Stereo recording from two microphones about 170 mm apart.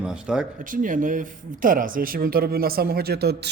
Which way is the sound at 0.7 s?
50° right (ahead or behind).